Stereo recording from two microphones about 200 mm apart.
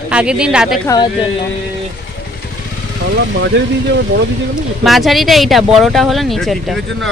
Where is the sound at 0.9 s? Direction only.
20° left (ahead or behind).